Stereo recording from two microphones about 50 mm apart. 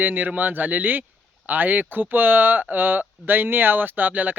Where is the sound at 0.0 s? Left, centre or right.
Right.